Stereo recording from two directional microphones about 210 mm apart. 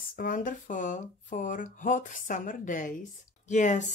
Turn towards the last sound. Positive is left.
turn(degrees=35)  # may be behind; listen again after turning